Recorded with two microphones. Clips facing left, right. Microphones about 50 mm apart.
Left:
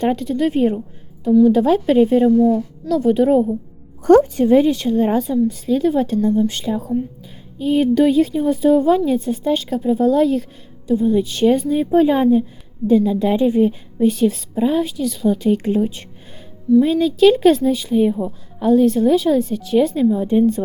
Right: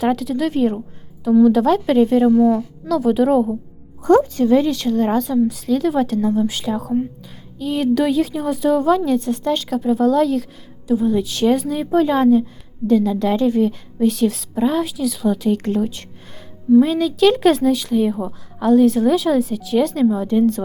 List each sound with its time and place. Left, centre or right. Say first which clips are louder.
0.0 s a woman's voice: left 1 dB; centre
2.3 s speech: even; right
2.9 s a woman's voice: left 1 dB; centre
4.2 s a woman's voice: left 2 dB; left
4.7 s a woman's voice: left 1 dB; centre
6.9 s speech: right 2 dB; centre
7.6 s a woman's voice: left 3 dB; centre
18.1 s a woman's voice: left 2 dB; right
18.6 s a woman's voice: even; centre